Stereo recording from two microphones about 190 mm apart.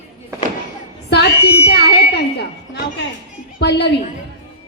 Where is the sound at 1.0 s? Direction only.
60° left (ahead or behind).